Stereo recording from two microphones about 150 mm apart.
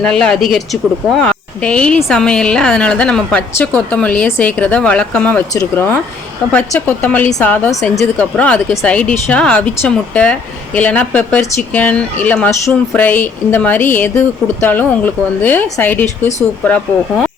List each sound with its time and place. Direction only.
0.0 s a woman's voice: 5° left (ahead or behind)